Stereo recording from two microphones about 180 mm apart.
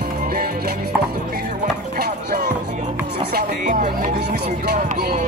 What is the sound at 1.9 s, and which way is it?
Music, 55° right (ahead or behind).